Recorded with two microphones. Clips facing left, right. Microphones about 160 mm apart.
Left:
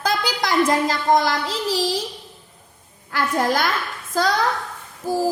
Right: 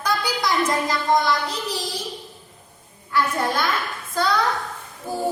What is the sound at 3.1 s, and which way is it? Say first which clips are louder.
Speech: left 2 dB; 90° left.